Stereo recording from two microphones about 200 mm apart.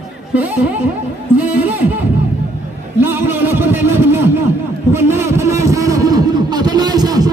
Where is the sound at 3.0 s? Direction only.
10° right (ahead or behind).